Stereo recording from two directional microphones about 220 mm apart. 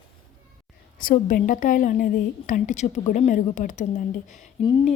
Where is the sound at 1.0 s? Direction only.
40° left (ahead or behind).